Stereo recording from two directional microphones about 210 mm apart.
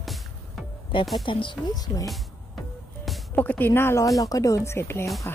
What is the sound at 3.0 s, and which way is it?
Speech, centre (ahead or behind).